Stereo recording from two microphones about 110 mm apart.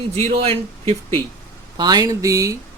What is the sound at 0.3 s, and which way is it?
Speech, 60° right (ahead or behind).